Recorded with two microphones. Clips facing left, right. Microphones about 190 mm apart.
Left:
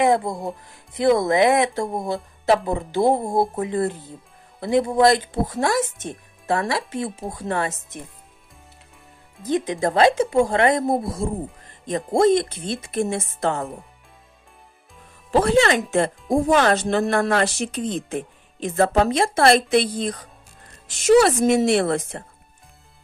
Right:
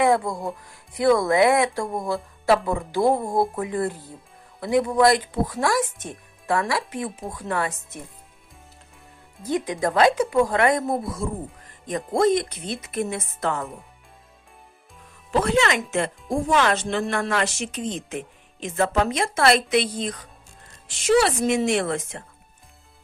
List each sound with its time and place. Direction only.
0.0 s speech: 20° left (ahead or behind)
9.4 s speech: 20° left (ahead or behind)
15.3 s speech: 35° left (ahead or behind)